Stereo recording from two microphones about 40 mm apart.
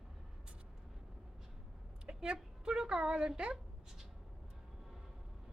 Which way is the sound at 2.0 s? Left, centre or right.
Right.